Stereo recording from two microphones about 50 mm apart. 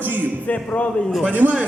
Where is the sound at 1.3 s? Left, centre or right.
Right.